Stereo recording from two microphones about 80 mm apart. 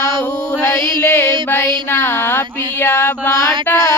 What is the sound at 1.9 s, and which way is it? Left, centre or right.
Music, left.